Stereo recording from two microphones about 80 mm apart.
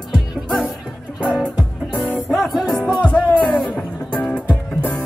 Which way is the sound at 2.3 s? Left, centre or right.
Centre.